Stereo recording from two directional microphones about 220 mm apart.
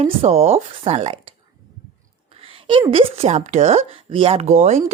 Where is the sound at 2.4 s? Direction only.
25° right (ahead or behind).